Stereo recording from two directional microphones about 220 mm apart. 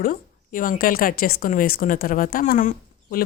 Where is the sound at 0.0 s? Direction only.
40° left (ahead or behind).